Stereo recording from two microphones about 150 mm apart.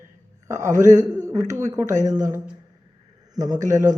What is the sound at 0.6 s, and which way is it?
A man's voice, 55° right (ahead or behind).